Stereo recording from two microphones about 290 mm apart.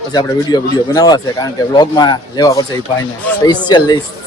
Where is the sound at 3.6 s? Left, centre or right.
Centre.